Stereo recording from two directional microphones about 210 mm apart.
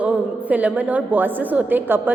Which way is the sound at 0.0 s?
5° right (ahead or behind).